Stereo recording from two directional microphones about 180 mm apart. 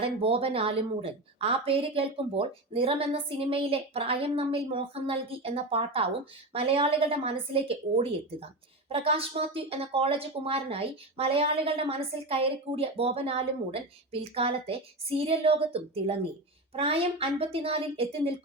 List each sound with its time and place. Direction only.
0.0 s speech: 30° right (ahead or behind)